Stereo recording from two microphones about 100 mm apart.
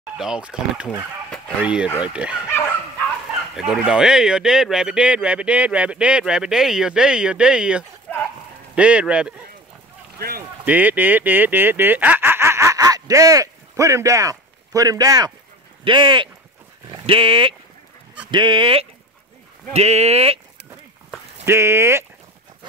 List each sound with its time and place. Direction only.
0.2 s speech: 5° right (ahead or behind)
2.4 s bow-wow: 25° left (ahead or behind)
3.5 s speech: 5° right (ahead or behind)
8.1 s a sound: 5° left (ahead or behind)
8.7 s speech: 10° right (ahead or behind)
10.6 s speech: 15° right (ahead or behind); by 15.3 s 40° right (ahead or behind)
15.8 s speech: 50° right (ahead or behind)
19.7 s speech: 90° right
21.5 s speech: 25° right (ahead or behind)